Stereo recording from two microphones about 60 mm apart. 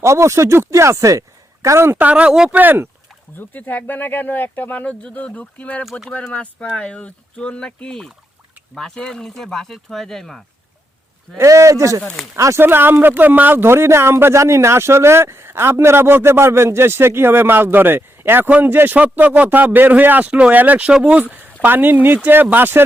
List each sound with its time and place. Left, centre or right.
0.0 s speech: right
1.6 s speech: right
2.0 s speech: right
3.3 s speech: left
5.8 s speech: centre
6.1 s speech: centre
11.3 s speech: right
12.5 s speech: right